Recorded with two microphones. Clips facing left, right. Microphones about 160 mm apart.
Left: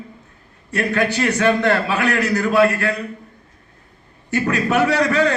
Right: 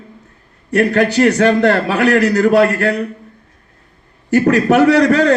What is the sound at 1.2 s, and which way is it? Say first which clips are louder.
A man's voice: right 3 dB; 45° right (ahead or behind).